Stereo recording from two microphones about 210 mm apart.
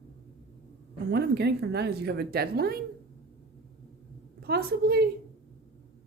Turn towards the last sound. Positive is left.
turn(degrees=-45)  # may be behind; listen again after turning